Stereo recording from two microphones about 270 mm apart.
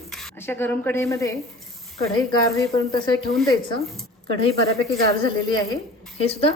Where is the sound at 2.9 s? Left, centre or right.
Centre.